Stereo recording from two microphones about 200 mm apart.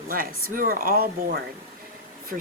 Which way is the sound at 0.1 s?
45° right (ahead or behind).